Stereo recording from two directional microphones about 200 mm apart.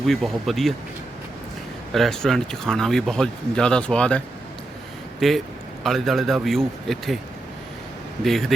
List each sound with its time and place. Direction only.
0.1 s speech: centre (ahead or behind)
1.9 s speech: centre (ahead or behind)
5.2 s speech: centre (ahead or behind)
8.2 s speech: centre (ahead or behind)